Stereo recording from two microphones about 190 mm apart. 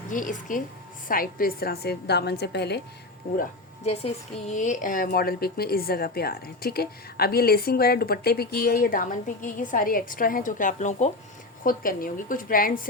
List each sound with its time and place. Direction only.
0.1 s a woman's voice: 45° left (ahead or behind)
3.8 s a woman's voice: 35° left (ahead or behind)